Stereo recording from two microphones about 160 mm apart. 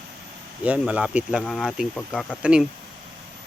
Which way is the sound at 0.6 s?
10° right (ahead or behind).